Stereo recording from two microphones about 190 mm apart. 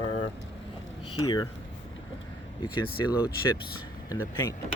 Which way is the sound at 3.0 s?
20° left (ahead or behind).